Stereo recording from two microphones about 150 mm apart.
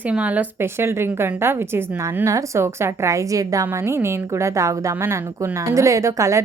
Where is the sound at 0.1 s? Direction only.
10° right (ahead or behind).